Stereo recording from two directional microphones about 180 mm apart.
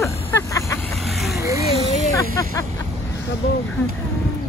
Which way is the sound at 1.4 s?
15° right (ahead or behind).